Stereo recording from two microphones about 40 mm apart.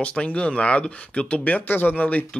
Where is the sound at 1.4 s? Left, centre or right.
Left.